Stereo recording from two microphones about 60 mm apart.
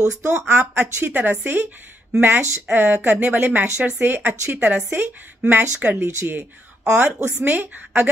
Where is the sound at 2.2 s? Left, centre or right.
Right.